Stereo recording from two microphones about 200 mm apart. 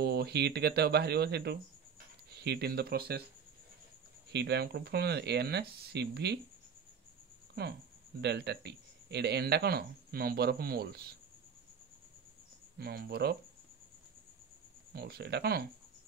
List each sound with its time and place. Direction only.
0.0 s speech: 55° right (ahead or behind)
4.3 s speech: 55° right (ahead or behind)
8.2 s speech: 55° right (ahead or behind)
12.7 s speech: 50° right (ahead or behind)
14.9 s speech: 50° right (ahead or behind)